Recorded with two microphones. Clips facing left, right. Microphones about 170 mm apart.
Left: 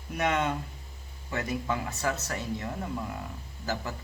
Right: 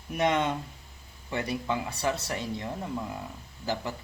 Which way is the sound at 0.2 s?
25° right (ahead or behind).